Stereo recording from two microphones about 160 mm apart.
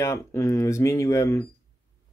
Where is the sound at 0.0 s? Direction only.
15° left (ahead or behind).